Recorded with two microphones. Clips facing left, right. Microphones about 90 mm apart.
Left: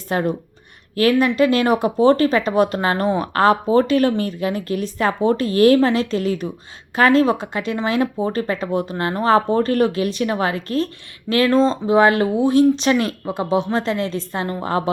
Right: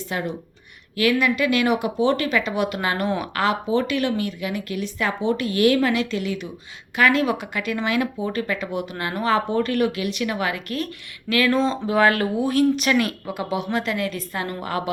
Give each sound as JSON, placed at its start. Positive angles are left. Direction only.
{"t": 0.1, "sound": "speech", "side_deg": 40}